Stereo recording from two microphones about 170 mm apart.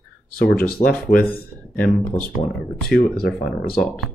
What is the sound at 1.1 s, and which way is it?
Speech, 55° left (ahead or behind).